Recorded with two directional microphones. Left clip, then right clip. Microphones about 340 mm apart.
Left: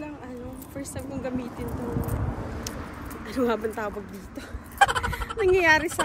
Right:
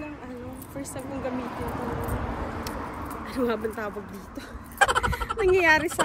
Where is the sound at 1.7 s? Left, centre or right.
Right.